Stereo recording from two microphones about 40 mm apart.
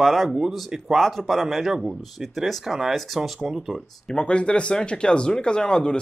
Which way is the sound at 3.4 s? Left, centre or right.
Centre.